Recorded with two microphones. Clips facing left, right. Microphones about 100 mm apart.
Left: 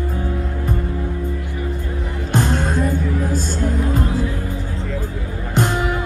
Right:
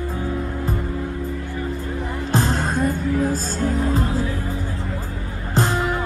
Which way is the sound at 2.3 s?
35° right (ahead or behind).